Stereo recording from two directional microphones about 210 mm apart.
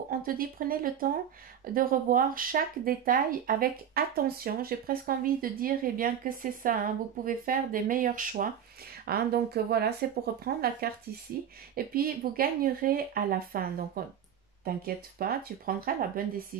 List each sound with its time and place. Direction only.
0.1 s speech: 45° right (ahead or behind)